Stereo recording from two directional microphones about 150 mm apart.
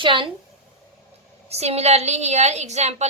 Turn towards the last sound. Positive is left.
turn(degrees=-45)  # may be behind; listen again after turning